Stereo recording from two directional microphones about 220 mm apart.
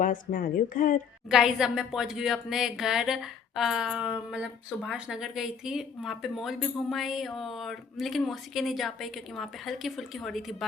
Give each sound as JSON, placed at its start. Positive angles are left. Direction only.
{"t": 0.0, "sound": "speech", "side_deg": 35}
{"t": 1.3, "sound": "a woman's voice", "side_deg": -5}